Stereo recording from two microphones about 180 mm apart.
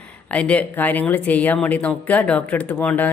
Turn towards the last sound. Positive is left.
turn(degrees=10)  # may be behind; listen again after turning